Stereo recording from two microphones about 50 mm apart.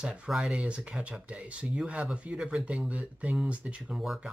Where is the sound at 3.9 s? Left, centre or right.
Centre.